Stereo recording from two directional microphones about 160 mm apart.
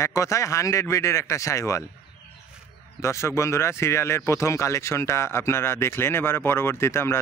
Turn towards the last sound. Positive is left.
turn(degrees=15)  # may be behind; listen again after turning